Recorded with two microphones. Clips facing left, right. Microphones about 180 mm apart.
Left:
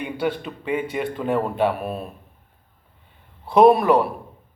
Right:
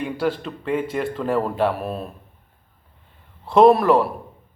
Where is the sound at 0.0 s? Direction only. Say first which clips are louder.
Right 1 dB; centre (ahead or behind).